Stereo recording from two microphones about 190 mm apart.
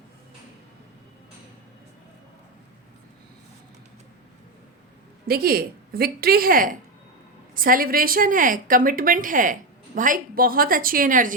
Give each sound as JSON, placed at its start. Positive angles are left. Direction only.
{"t": 5.3, "sound": "a woman's voice", "side_deg": -50}